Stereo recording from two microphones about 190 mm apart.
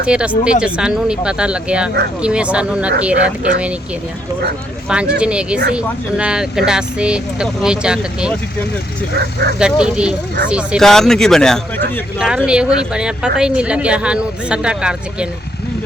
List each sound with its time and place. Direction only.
0.1 s speech: 5° right (ahead or behind)
4.9 s speech: 5° right (ahead or behind)
9.1 s speech: 55° right (ahead or behind)
9.6 s speech: 5° right (ahead or behind)